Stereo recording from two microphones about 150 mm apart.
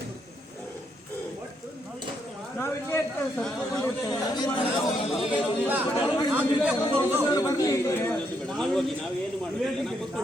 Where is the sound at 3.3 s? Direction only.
5° left (ahead or behind).